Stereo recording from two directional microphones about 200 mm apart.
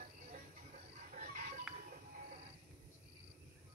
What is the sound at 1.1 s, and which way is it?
Chicken, 40° right (ahead or behind).